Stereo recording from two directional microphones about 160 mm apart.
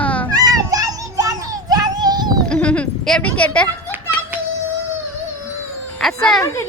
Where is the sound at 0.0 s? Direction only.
10° left (ahead or behind).